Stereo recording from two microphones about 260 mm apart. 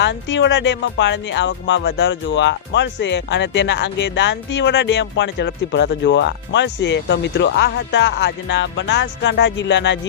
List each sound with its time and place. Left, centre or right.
0.0 s speech: left